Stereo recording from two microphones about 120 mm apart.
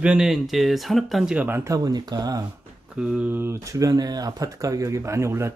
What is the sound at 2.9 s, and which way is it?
Speech, 10° right (ahead or behind).